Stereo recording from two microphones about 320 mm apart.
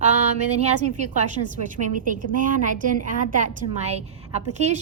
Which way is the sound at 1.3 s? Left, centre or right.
Right.